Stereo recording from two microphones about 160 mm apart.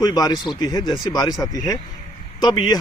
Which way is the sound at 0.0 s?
25° left (ahead or behind).